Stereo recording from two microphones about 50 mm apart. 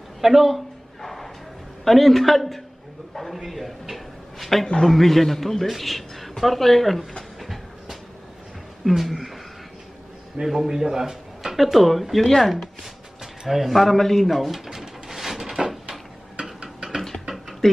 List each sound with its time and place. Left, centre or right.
0.2 s a man's voice: centre
1.0 s a sound: centre
1.9 s a man's voice: centre
7.3 s train: centre
8.8 s speech: centre
10.4 s a man's voice: centre
13.2 s pigeon: centre
16.3 s a sound: centre